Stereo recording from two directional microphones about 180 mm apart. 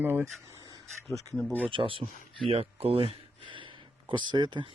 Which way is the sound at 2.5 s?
35° right (ahead or behind).